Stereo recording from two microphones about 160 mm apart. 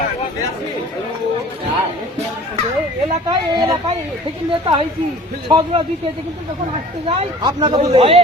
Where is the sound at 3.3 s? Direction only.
35° right (ahead or behind).